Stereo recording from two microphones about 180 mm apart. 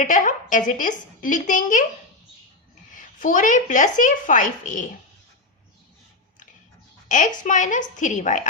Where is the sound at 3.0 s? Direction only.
45° left (ahead or behind).